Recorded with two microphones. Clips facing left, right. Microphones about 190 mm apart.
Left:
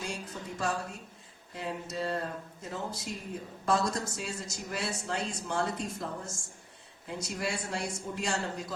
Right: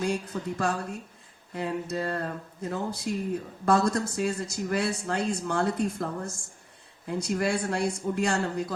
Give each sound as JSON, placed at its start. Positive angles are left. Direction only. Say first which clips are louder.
{"t": 0.0, "sound": "speech", "louder": "right 9 dB", "side_deg": -60}